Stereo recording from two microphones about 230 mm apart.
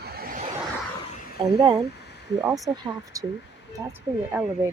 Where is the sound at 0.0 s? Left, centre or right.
Right.